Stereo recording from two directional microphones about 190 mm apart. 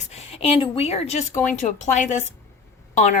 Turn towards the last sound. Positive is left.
turn(degrees=40)  # may be behind; listen again after turning